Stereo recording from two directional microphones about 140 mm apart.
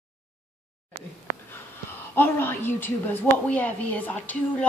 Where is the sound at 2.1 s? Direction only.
15° left (ahead or behind).